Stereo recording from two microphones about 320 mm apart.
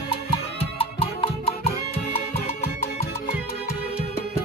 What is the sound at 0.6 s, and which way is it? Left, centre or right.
Music, centre.